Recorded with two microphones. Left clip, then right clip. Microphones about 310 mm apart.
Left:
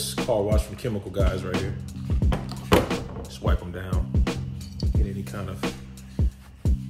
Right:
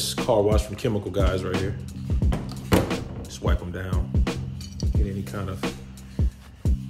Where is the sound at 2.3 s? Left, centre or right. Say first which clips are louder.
Left 3 dB; left.